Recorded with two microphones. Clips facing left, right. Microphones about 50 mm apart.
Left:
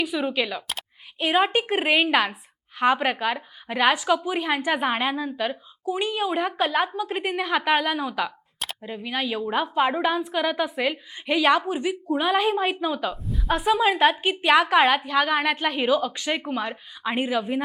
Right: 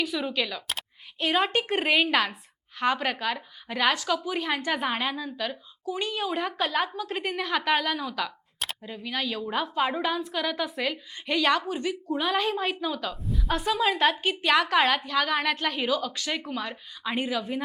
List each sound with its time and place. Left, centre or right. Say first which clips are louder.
0.0 s a woman's voice: left 3 dB; centre
13.2 s a sound: even; centre
13.5 s a woman's voice: left 5 dB; centre